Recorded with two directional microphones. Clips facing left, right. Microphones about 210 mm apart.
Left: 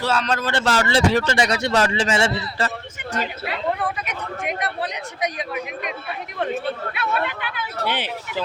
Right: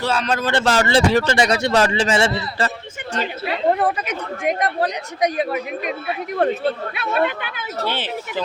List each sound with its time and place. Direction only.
0.0 s speech: centre (ahead or behind)
0.3 s speech: 20° right (ahead or behind)
3.4 s speech: 40° right (ahead or behind)
6.9 s speech: 25° right (ahead or behind)
7.9 s speech: 15° left (ahead or behind)